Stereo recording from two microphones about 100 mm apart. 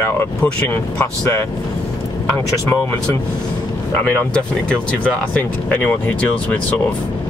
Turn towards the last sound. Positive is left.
turn(degrees=15)  # may be behind; listen again after turning